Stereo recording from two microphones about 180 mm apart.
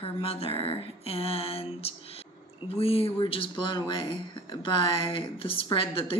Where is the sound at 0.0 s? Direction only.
30° left (ahead or behind).